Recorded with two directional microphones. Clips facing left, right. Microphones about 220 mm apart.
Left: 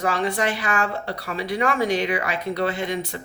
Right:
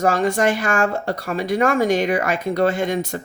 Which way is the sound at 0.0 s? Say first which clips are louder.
Right 5 dB; 45° right (ahead or behind).